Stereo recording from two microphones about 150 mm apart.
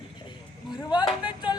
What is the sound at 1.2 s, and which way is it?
Music, 30° left (ahead or behind).